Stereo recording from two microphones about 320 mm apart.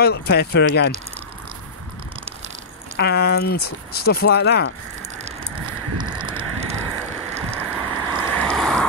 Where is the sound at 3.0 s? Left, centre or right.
Left.